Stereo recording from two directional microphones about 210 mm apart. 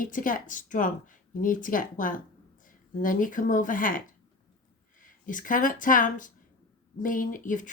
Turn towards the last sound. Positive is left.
turn(degrees=40)  # may be behind; listen again after turning